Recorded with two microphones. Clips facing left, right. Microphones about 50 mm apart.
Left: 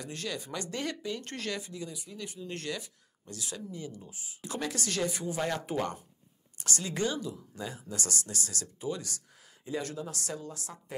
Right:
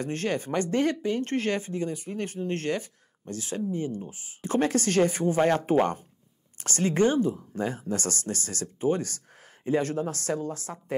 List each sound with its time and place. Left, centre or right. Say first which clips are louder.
0.0 s speech: right 9 dB; right